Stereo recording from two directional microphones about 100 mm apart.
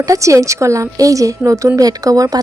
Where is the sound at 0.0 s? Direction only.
35° right (ahead or behind).